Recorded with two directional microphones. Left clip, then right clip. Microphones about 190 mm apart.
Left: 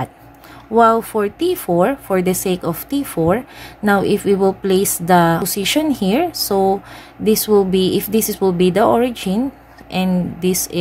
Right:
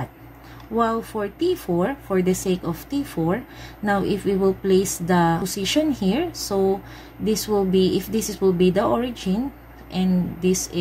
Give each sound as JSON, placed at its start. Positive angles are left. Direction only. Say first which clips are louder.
{"t": 0.7, "sound": "speech", "louder": "left 10 dB", "side_deg": 45}